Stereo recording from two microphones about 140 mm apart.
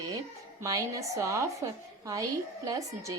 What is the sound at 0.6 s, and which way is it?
A woman's voice, 25° right (ahead or behind).